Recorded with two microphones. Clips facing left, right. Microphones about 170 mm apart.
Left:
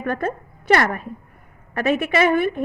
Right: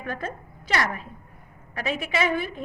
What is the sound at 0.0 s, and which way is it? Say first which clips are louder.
A woman's voice: left 8 dB; 60° left (ahead or behind).